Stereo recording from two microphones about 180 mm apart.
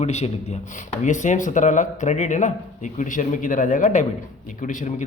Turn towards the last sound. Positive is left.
turn(degrees=45)  # may be behind; listen again after turning